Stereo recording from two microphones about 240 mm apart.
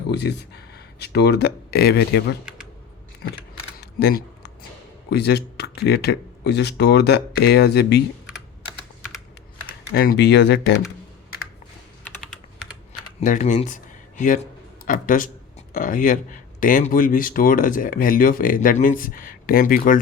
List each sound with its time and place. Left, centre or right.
0.1 s speech: left
3.8 s camera: left
5.1 s speech: left
9.9 s speech: left
12.0 s typing: centre
13.2 s speech: left